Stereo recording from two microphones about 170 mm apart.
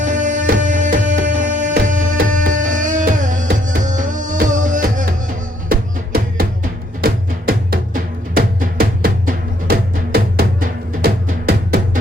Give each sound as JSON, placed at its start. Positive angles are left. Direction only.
{"t": 0.0, "sound": "music", "side_deg": -45}
{"t": 5.6, "sound": "music", "side_deg": -65}
{"t": 7.0, "sound": "drum", "side_deg": -65}